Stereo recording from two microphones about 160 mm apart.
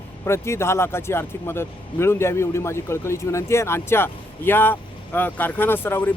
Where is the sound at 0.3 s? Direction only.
15° left (ahead or behind).